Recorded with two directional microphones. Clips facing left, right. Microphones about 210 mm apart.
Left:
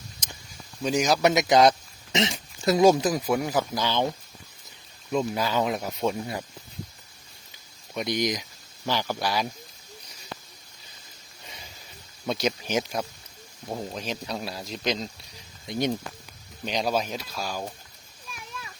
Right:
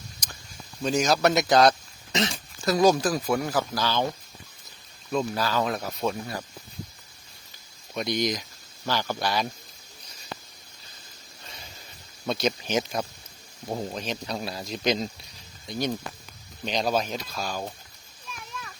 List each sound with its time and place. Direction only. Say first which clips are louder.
0.9 s speech: even; 15° left (ahead or behind)
5.1 s speech: left 1 dB; 15° left (ahead or behind)
7.9 s speech: even; 15° left (ahead or behind)
12.2 s speech: even; 10° left (ahead or behind)
15.6 s speech: left 2 dB; 20° left (ahead or behind)
16.6 s speech: right 1 dB; 10° left (ahead or behind)